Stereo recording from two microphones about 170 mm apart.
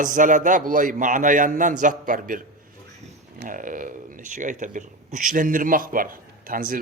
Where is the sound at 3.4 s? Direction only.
50° right (ahead or behind).